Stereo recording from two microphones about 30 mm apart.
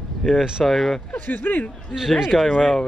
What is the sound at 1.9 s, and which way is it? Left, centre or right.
Speech, centre.